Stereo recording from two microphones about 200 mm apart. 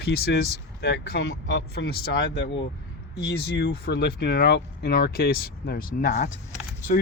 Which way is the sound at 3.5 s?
60° left (ahead or behind).